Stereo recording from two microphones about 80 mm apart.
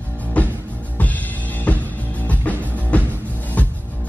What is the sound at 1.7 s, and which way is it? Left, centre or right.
Music, centre.